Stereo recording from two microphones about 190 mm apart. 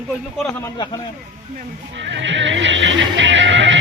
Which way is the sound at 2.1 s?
70° right (ahead or behind).